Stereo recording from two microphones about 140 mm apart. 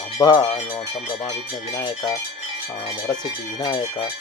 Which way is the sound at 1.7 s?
25° left (ahead or behind).